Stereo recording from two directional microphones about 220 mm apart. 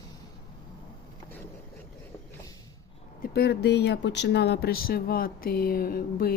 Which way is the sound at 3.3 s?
45° left (ahead or behind).